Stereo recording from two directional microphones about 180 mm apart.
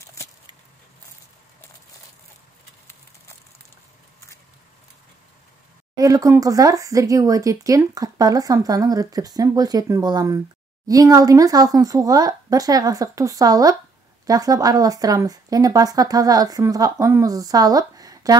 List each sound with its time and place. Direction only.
5.9 s speech: 20° right (ahead or behind)